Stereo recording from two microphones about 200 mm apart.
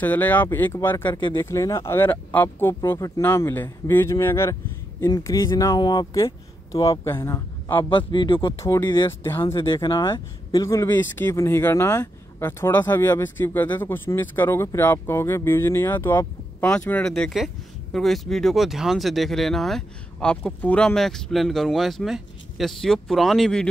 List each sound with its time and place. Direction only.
0.0 s speech: 10° left (ahead or behind)
8.1 s speech: 25° left (ahead or behind)
9.6 s speech: 25° left (ahead or behind); by 23.7 s centre (ahead or behind)